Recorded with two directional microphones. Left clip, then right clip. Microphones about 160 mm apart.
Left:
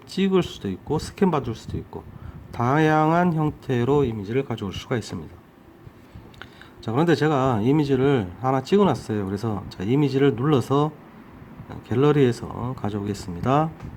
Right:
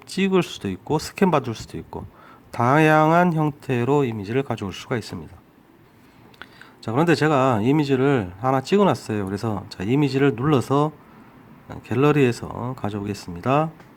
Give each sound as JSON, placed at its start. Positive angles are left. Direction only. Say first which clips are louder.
{"t": 0.1, "sound": "speech", "louder": "right 1 dB", "side_deg": -20}
{"t": 6.8, "sound": "speech", "louder": "right 1 dB", "side_deg": -20}